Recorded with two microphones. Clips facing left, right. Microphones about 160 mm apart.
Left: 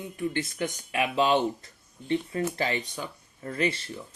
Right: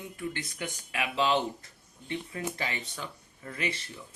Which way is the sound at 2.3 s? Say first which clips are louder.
Left 4 dB; 35° left (ahead or behind).